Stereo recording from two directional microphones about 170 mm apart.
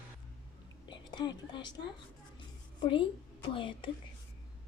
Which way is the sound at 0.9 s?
25° left (ahead or behind).